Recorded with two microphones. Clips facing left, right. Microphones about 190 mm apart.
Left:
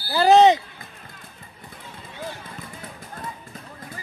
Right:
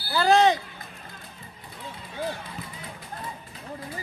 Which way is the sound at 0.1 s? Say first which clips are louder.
Left 5 dB; 20° left (ahead or behind).